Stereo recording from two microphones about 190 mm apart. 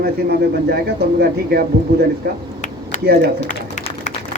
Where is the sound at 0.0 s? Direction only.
55° right (ahead or behind).